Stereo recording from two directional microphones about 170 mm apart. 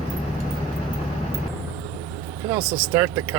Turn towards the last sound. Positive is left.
turn(degrees=-15)  # may be behind; listen again after turning